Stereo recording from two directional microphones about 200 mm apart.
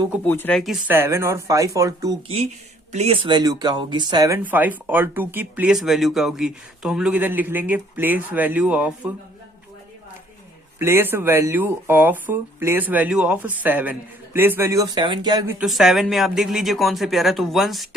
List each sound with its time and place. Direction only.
0.3 s speech: 10° left (ahead or behind); by 2.1 s 15° right (ahead or behind)
2.2 s speech: 30° right (ahead or behind); by 9.1 s 5° right (ahead or behind)
10.8 s speech: 10° right (ahead or behind)
15.5 s speech: centre (ahead or behind)